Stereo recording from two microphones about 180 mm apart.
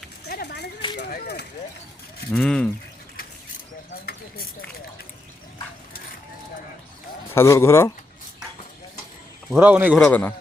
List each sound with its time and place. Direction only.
0.3 s a sound: 65° left (ahead or behind)
2.3 s speech: 5° left (ahead or behind)
7.3 s speech: 15° left (ahead or behind)
9.5 s a man's voice: 10° right (ahead or behind)
10.0 s speech: 10° left (ahead or behind)